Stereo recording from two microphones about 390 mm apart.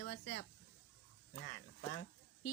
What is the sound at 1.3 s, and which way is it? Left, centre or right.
Speech, left.